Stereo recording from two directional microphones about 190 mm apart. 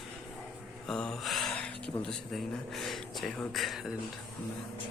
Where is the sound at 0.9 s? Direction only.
5° left (ahead or behind).